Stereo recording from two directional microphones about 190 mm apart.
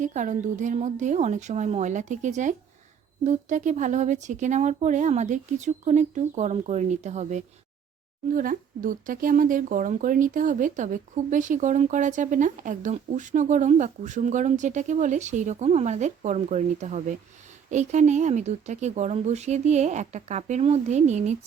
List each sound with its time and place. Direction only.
0.0 s speech: 40° right (ahead or behind)